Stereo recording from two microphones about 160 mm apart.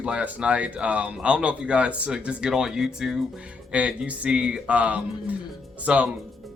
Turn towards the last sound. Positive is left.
turn(degrees=-10)  # may be behind; listen again after turning